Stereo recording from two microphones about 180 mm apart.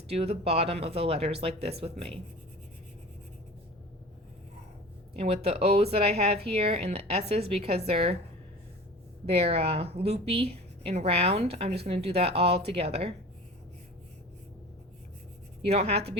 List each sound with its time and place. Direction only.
0.1 s a woman's voice: 35° right (ahead or behind)
5.1 s a woman's voice: 35° right (ahead or behind)
9.2 s a woman's voice: 35° right (ahead or behind)
15.6 s a woman's voice: 35° right (ahead or behind)